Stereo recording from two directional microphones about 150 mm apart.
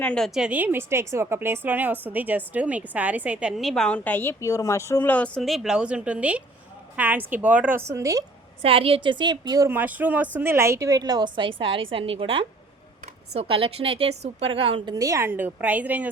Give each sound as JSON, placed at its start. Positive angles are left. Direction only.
{"t": 0.0, "sound": "a woman's voice", "side_deg": 5}
{"t": 0.3, "sound": "a woman's voice", "side_deg": -10}
{"t": 8.6, "sound": "a woman's voice", "side_deg": -40}
{"t": 9.6, "sound": "a woman's voice", "side_deg": -10}
{"t": 14.9, "sound": "a woman's voice", "side_deg": -20}